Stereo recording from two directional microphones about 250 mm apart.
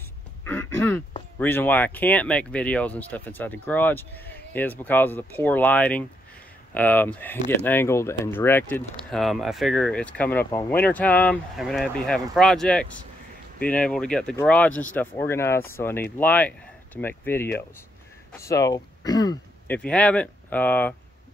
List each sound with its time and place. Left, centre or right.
0.5 s throat clearing: centre
1.4 s speech: centre
19.8 s speech: centre